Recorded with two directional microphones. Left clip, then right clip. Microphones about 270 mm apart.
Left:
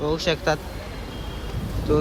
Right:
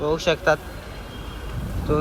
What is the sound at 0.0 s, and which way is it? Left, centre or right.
Speech, centre.